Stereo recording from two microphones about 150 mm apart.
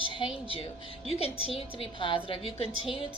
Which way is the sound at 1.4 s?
40° left (ahead or behind).